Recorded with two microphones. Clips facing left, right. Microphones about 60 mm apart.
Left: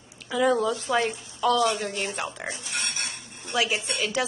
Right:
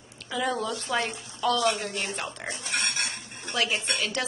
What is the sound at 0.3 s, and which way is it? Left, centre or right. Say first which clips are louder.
A man's voice: left 6 dB; centre.